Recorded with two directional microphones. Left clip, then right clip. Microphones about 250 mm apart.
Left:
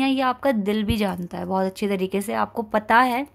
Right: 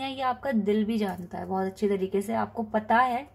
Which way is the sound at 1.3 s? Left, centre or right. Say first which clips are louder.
Left 6 dB; left.